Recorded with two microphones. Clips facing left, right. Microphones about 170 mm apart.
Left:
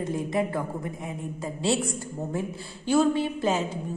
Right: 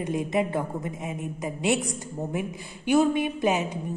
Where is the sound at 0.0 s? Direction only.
20° right (ahead or behind).